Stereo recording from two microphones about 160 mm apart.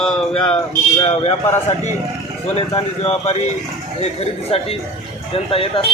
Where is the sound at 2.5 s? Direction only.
35° left (ahead or behind).